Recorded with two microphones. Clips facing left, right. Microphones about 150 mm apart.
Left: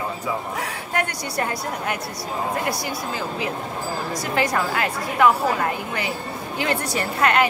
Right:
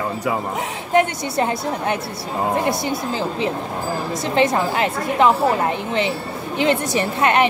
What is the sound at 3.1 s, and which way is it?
A woman's voice, 30° right (ahead or behind).